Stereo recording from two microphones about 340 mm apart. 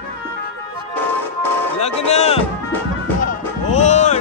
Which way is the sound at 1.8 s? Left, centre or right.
Centre.